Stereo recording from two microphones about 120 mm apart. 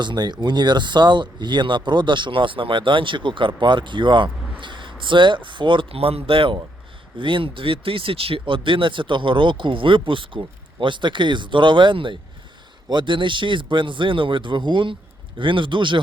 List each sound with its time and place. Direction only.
0.0 s speech: 35° right (ahead or behind)